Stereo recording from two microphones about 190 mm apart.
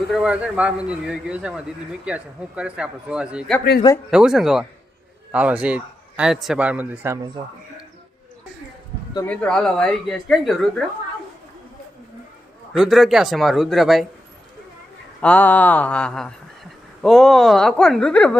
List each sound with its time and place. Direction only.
0.1 s a woman's voice: 5° right (ahead or behind)
3.6 s speech: 55° left (ahead or behind)
4.1 s a woman's voice: 5° right (ahead or behind)
9.2 s a woman's voice: 5° left (ahead or behind)
12.7 s a woman's voice: centre (ahead or behind)
15.2 s mantra: 10° left (ahead or behind)
17.0 s a woman's voice: centre (ahead or behind)